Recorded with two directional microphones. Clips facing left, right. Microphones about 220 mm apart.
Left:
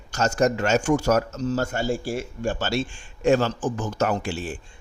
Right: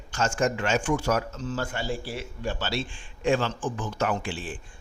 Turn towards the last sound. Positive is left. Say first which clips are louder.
# left 4 dB
turn(degrees=45)  # may be behind; listen again after turning